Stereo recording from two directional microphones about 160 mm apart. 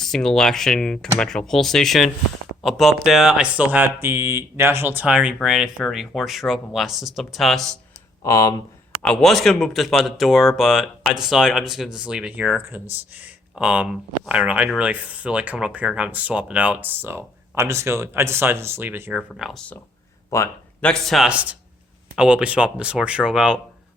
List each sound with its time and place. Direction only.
0.0 s speech: 5° left (ahead or behind)
8.2 s speech: 20° left (ahead or behind)
9.0 s speech: 5° left (ahead or behind); by 19.2 s 10° right (ahead or behind)
19.4 s speech: centre (ahead or behind)
20.3 s speech: 15° left (ahead or behind)
20.9 s speech: centre (ahead or behind)